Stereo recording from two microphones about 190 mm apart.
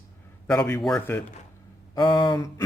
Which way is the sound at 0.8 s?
5° left (ahead or behind).